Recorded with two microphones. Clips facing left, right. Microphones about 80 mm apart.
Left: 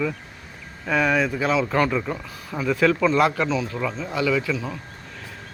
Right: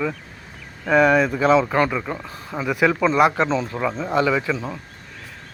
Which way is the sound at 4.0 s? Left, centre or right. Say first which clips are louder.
Right 3 dB; right.